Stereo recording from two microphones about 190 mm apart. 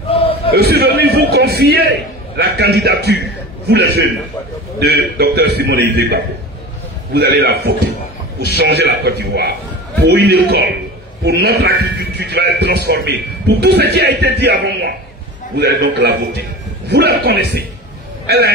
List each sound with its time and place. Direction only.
0.5 s a man's voice: 55° right (ahead or behind)